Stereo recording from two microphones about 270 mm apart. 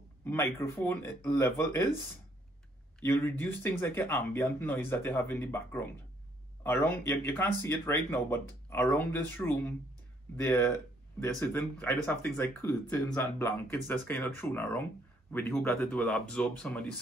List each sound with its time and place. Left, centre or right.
0.2 s speech: centre
3.0 s speech: centre